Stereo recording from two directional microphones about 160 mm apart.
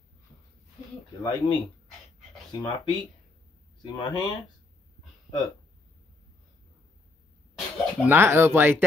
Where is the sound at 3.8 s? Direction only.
25° left (ahead or behind).